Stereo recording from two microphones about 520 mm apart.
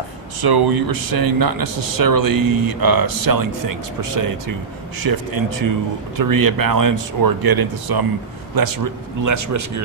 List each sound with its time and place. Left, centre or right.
0.4 s speech: right